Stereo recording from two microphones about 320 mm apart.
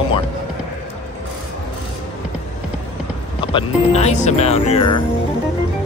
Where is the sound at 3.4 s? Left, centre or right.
Centre.